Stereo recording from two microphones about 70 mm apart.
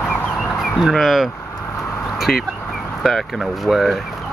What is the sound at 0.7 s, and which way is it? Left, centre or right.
Speech, centre.